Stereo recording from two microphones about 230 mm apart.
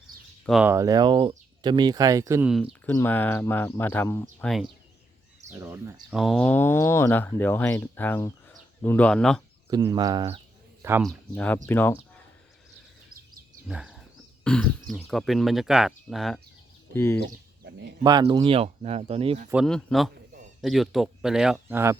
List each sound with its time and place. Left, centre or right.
0.4 s speech: centre
0.7 s speech: centre
2.8 s speech: centre
5.5 s speech: centre
9.6 s speech: centre
10.8 s speech: centre
11.3 s speech: centre
13.7 s speech: centre
17.2 s chicken: right
18.0 s speech: centre
19.6 s speech: centre